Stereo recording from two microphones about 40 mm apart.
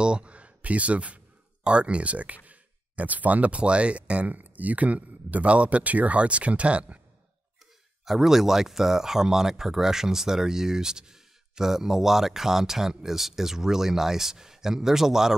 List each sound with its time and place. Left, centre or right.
0.0 s speech: right
4.3 s speech: right
8.0 s speech: centre